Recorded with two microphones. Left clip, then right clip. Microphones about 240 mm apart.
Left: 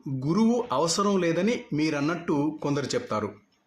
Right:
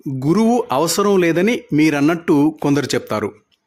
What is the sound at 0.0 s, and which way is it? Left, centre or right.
Speech, right.